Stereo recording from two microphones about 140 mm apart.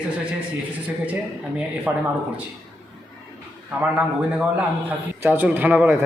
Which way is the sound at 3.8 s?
10° right (ahead or behind).